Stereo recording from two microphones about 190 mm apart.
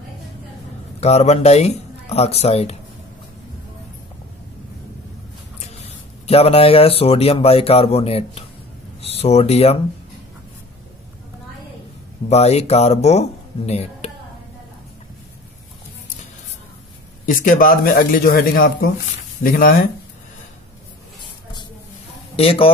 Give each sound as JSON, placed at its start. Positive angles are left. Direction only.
{"t": 1.0, "sound": "speech", "side_deg": 35}
{"t": 6.2, "sound": "speech", "side_deg": 30}
{"t": 12.3, "sound": "speech", "side_deg": 35}
{"t": 17.3, "sound": "speech", "side_deg": 45}
{"t": 22.3, "sound": "a man's voice", "side_deg": 30}